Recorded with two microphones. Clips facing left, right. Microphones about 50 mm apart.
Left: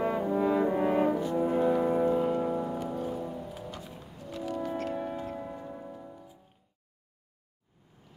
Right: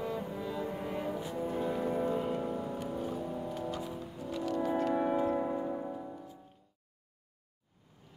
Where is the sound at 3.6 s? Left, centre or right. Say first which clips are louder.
Right 5 dB; centre.